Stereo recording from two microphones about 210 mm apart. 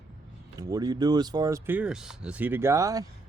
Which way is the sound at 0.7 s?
20° right (ahead or behind).